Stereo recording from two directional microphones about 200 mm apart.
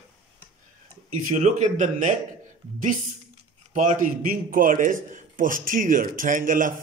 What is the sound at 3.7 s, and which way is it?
A man's voice, 40° right (ahead or behind).